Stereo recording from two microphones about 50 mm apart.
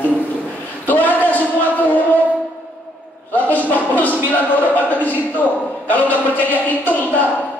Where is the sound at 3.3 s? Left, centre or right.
Left.